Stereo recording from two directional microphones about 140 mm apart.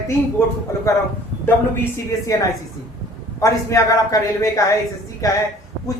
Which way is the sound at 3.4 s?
25° left (ahead or behind).